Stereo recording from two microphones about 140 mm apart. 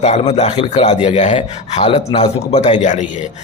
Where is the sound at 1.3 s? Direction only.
40° left (ahead or behind).